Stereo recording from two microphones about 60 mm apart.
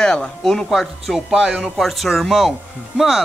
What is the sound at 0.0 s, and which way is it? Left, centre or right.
Music, centre.